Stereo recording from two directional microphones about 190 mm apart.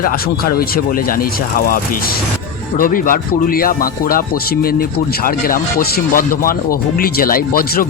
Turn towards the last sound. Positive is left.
turn(degrees=50)  # may be behind; listen again after turning